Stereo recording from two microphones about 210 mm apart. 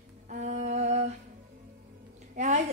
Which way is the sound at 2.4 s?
35° right (ahead or behind).